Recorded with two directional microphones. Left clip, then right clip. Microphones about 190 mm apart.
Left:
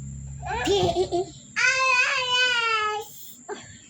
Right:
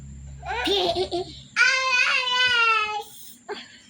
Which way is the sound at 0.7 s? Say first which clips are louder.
Left 1 dB; 15° right (ahead or behind).